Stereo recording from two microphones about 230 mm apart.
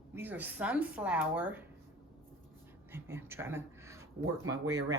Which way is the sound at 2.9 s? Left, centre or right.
Centre.